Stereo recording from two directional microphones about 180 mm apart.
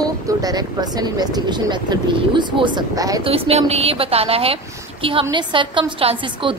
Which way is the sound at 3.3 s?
35° right (ahead or behind).